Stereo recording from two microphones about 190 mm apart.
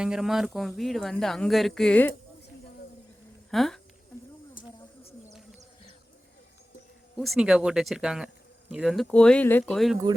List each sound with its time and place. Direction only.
0.0 s speech: 5° right (ahead or behind)
3.5 s speech: centre (ahead or behind)
4.6 s a sound: 45° left (ahead or behind)
7.2 s speech: centre (ahead or behind)